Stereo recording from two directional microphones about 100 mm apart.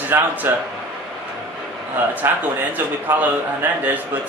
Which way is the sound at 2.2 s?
25° right (ahead or behind).